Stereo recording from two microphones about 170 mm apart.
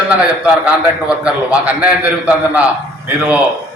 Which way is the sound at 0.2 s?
5° right (ahead or behind).